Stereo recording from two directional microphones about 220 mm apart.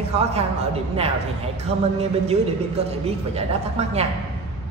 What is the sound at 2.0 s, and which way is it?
A woman's voice, 30° right (ahead or behind).